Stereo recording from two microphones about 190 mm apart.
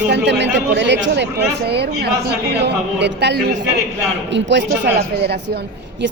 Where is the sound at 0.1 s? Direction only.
65° right (ahead or behind).